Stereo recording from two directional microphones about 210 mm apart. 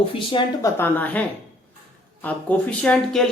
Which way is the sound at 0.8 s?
10° left (ahead or behind).